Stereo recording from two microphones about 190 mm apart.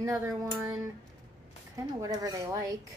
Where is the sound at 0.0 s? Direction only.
10° right (ahead or behind).